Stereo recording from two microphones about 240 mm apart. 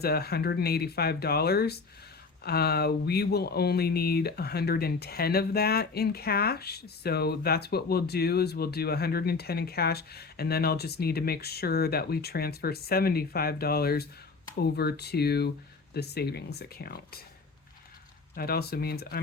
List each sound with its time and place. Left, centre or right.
0.0 s speech: left
18.3 s speech: left